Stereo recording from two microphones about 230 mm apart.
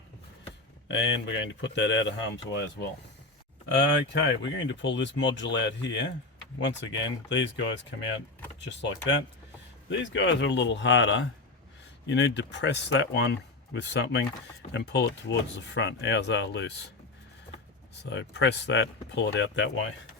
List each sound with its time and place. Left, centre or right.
0.9 s speech: left
4.1 s speech: left
9.9 s speech: left
18.0 s speech: left